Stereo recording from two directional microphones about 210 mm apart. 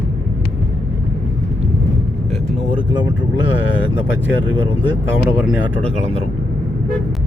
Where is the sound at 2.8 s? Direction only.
20° right (ahead or behind).